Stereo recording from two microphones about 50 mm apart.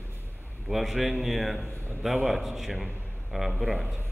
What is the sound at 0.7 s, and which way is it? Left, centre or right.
A man's voice, centre.